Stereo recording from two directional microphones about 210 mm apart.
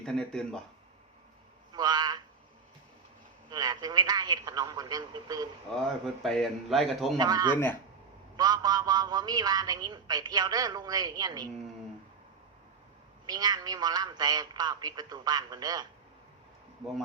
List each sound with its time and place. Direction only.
0.0 s a man's voice: 5° left (ahead or behind)
1.7 s a sound: 20° right (ahead or behind)
3.5 s a man's voice: 20° right (ahead or behind)
6.2 s a man's voice: centre (ahead or behind)
7.2 s a man's voice: 20° right (ahead or behind)
7.5 s speech: 10° left (ahead or behind)
8.4 s a man's voice: 20° right (ahead or behind)
13.2 s a man's voice: 20° right (ahead or behind)